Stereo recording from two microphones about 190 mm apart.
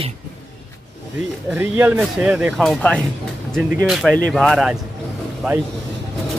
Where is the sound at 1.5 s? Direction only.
10° right (ahead or behind).